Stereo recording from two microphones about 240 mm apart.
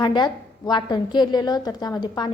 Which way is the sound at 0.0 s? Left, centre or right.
Centre.